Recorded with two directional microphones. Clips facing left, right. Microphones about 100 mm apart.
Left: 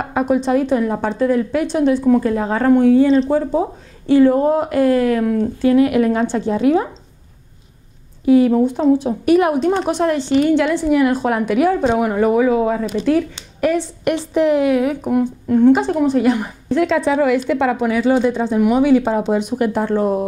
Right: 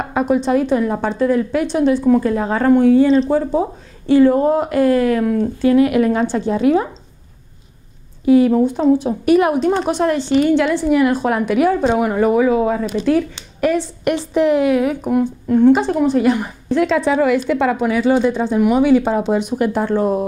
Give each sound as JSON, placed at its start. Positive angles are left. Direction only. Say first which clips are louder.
{"t": 0.0, "sound": "a woman's voice", "louder": "even", "side_deg": -20}
{"t": 8.3, "sound": "a woman's voice", "louder": "even", "side_deg": -15}